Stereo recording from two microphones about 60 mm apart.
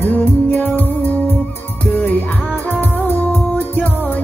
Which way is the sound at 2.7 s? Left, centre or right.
Left.